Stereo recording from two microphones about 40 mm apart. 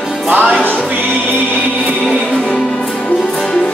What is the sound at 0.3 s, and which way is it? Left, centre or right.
Music, right.